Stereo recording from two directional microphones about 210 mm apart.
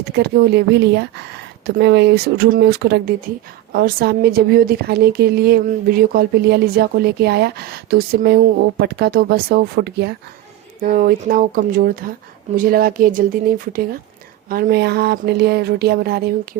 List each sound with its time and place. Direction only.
0.2 s a woman's voice: 50° right (ahead or behind)
10.8 s a woman's voice: 40° right (ahead or behind)